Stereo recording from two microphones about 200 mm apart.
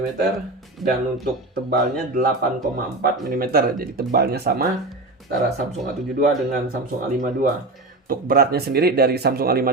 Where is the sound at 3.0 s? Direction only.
50° right (ahead or behind).